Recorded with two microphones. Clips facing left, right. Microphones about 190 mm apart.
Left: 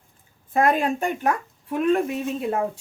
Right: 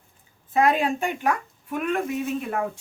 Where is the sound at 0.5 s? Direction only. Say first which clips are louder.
Left 1 dB; 45° left (ahead or behind).